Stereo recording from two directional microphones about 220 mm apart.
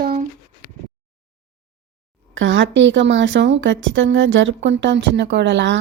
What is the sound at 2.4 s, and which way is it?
A woman's voice, 60° right (ahead or behind).